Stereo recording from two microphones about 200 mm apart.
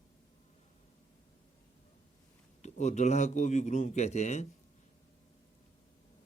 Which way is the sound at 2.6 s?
35° left (ahead or behind).